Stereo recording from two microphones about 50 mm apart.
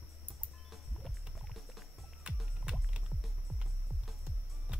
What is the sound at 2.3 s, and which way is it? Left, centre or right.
Music, right.